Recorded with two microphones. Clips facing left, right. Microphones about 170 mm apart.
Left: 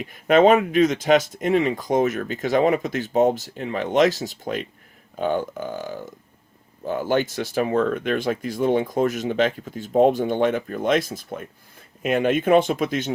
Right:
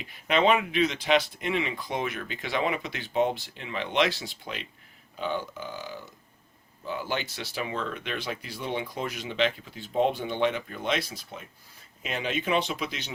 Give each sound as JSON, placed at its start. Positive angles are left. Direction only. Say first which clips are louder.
{"t": 0.0, "sound": "speech", "louder": "left 9 dB", "side_deg": 45}